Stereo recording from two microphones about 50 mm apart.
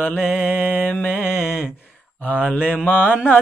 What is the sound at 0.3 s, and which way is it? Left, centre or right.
Mantra, left.